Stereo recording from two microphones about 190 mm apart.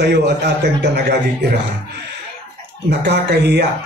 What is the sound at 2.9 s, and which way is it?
Speech, 60° right (ahead or behind).